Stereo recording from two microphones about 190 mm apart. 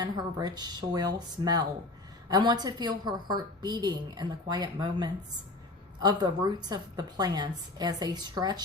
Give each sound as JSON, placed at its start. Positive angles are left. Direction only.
{"t": 0.0, "sound": "a woman's voice", "side_deg": -20}